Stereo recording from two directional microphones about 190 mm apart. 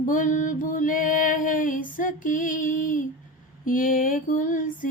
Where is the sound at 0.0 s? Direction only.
45° left (ahead or behind).